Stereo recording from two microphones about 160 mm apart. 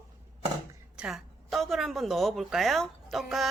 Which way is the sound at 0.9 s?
5° right (ahead or behind).